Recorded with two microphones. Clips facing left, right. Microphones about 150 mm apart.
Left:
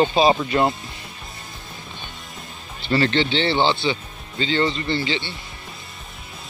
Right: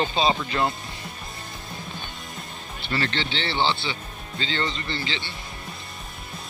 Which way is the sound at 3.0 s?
20° left (ahead or behind).